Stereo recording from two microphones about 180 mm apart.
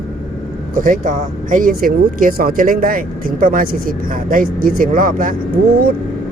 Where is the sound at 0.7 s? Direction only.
50° right (ahead or behind).